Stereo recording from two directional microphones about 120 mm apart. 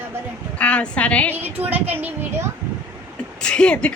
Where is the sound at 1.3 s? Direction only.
15° right (ahead or behind).